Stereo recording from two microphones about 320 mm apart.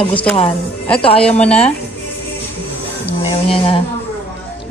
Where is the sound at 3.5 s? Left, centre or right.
Centre.